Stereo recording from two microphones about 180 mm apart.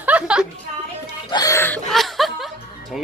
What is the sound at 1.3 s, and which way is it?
Chuckle, 20° left (ahead or behind).